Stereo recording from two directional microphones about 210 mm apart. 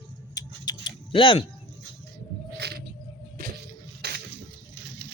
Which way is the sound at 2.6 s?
50° right (ahead or behind).